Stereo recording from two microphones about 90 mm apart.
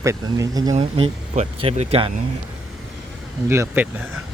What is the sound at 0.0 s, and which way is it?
Speech, 35° right (ahead or behind).